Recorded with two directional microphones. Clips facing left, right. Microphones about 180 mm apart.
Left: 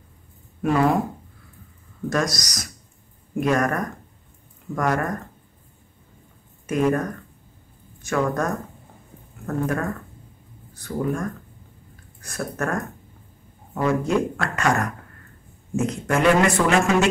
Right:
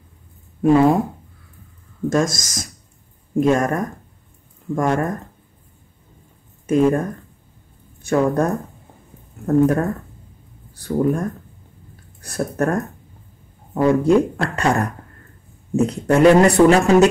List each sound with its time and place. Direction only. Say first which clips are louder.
0.6 s speech: right 6 dB; 30° right (ahead or behind)
2.3 s speech: right 2 dB; 25° right (ahead or behind)
6.7 s a man's voice: right 5 dB; 30° right (ahead or behind)